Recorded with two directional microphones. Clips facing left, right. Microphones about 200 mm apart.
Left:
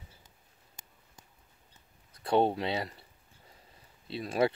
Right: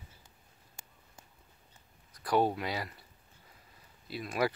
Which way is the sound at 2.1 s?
25° left (ahead or behind).